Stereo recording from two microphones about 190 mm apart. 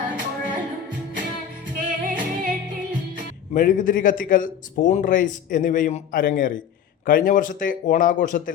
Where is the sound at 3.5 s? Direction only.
45° left (ahead or behind).